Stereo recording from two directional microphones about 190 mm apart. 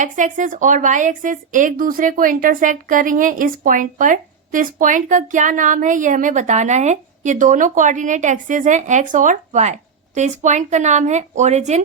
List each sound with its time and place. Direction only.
0.0 s a woman's voice: 40° right (ahead or behind)